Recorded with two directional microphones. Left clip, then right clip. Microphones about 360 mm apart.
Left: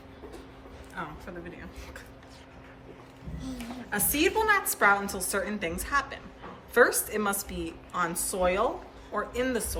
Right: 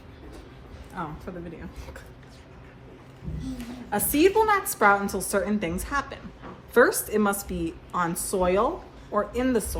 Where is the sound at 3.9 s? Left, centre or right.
Centre.